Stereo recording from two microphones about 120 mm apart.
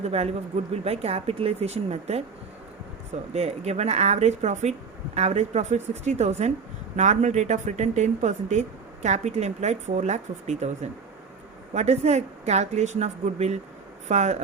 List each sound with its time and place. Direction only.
0.0 s speech: 65° right (ahead or behind)
3.3 s speech: 65° right (ahead or behind)
6.9 s speech: 80° right
11.7 s speech: 65° right (ahead or behind)